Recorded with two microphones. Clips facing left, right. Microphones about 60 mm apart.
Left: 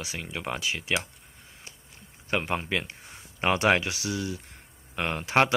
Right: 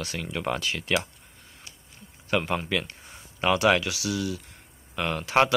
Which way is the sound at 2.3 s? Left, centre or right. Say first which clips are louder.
Right 2 dB; left.